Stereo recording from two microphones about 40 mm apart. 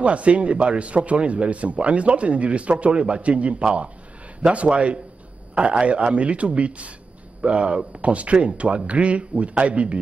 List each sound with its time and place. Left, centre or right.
0.0 s a man's voice: right